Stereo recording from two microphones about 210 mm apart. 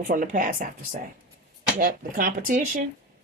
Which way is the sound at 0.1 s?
40° right (ahead or behind).